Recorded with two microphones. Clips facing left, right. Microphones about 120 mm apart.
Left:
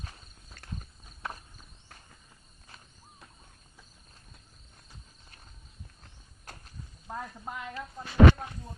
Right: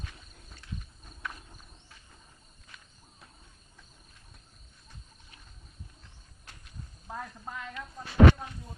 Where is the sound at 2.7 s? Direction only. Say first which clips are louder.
Even; 35° left (ahead or behind).